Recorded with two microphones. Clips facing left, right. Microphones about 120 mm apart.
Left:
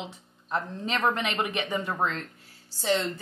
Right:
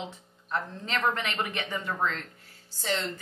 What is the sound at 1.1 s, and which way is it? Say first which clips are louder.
A woman's voice: left 3 dB; 15° left (ahead or behind).